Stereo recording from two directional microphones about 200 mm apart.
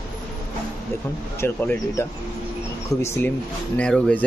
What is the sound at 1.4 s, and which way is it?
Speech, 10° left (ahead or behind).